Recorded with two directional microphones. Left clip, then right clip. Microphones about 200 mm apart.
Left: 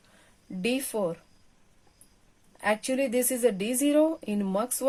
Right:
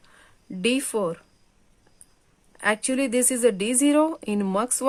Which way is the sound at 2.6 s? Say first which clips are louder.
Right 3 dB; 30° right (ahead or behind).